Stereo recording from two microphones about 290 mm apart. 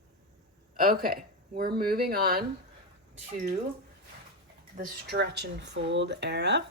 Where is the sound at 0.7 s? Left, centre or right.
Right.